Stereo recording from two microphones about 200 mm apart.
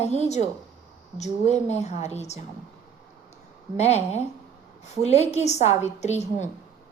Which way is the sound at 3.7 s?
35° left (ahead or behind).